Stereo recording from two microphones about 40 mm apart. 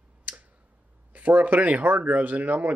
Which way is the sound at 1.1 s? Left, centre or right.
Right.